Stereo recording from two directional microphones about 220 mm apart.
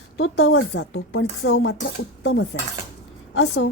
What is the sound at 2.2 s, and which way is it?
Dishes, 55° left (ahead or behind).